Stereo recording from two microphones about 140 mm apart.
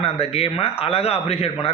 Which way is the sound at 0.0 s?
45° left (ahead or behind).